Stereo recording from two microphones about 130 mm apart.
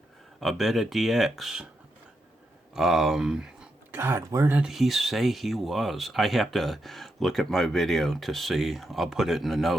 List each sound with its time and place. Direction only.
0.3 s speech: centre (ahead or behind)
2.7 s speech: 5° right (ahead or behind)
3.9 s speech: 20° right (ahead or behind)
4.5 s speech: 5° right (ahead or behind)